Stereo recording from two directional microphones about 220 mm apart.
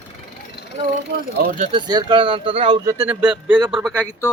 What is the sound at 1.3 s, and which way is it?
Speech, 35° right (ahead or behind).